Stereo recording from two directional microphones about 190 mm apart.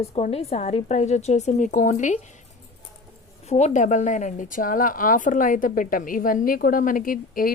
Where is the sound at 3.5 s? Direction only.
35° left (ahead or behind).